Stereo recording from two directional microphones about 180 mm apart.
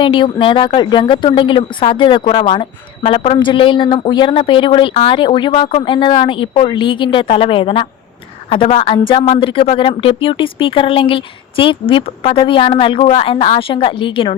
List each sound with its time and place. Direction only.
0.0 s a woman's voice: 25° left (ahead or behind)